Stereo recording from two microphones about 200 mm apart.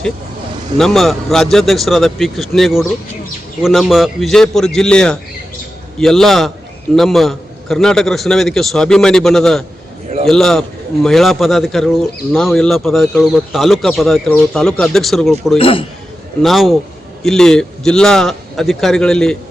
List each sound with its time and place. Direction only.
0.8 s speech: centre (ahead or behind)
15.5 s speech: 25° left (ahead or behind)
16.4 s speech: centre (ahead or behind)